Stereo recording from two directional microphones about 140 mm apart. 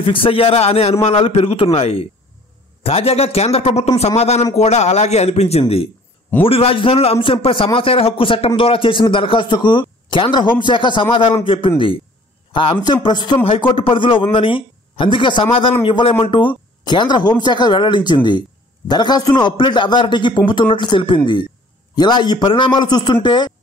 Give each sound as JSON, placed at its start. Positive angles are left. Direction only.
{"t": 0.0, "sound": "a man's voice", "side_deg": 40}